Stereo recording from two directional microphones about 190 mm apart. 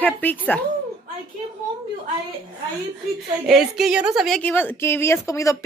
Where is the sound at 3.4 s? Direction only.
Centre (ahead or behind); by 5.6 s 15° left (ahead or behind).